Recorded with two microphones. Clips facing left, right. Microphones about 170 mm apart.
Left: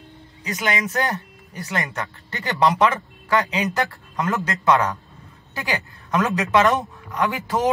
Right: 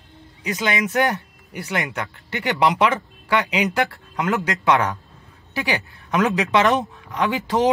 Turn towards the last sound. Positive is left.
turn(degrees=-20)  # may be behind; listen again after turning